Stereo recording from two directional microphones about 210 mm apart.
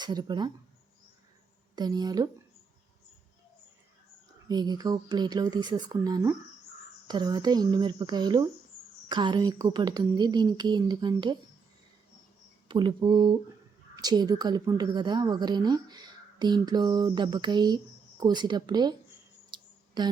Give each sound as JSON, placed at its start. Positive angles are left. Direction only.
{"t": 0.0, "sound": "a woman's voice", "side_deg": -20}
{"t": 1.7, "sound": "a woman's voice", "side_deg": -20}
{"t": 4.4, "sound": "a woman's voice", "side_deg": -20}
{"t": 12.6, "sound": "a woman's voice", "side_deg": -20}
{"t": 19.5, "sound": "a sound", "side_deg": -20}